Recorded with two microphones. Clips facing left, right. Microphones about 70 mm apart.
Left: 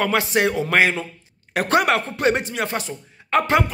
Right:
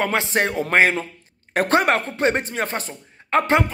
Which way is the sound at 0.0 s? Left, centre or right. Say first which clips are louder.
Left 2 dB; right.